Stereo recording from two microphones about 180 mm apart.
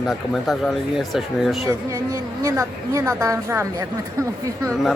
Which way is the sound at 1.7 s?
15° right (ahead or behind).